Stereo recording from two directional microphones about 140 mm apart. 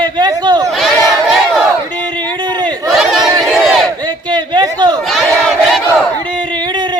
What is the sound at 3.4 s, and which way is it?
Battle cry, centre (ahead or behind).